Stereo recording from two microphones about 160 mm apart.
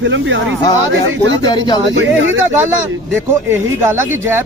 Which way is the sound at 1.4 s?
25° left (ahead or behind).